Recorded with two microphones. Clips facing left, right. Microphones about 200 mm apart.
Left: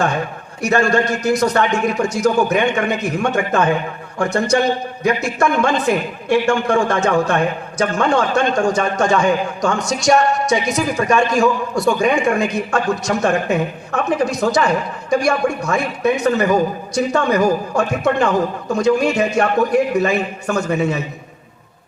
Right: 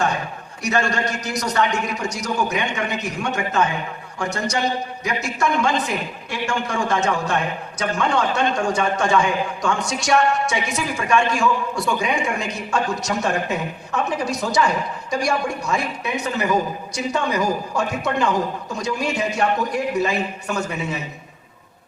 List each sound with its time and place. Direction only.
0.6 s a man's voice: 55° left (ahead or behind)